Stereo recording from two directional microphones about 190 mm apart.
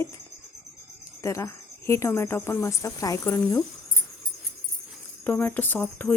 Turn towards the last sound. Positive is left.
turn(degrees=10)  # may be behind; listen again after turning